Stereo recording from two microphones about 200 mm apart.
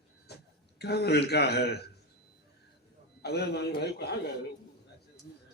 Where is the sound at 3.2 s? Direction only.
55° left (ahead or behind).